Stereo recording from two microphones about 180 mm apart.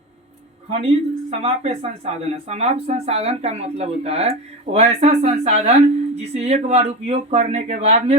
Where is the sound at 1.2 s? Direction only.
35° right (ahead or behind).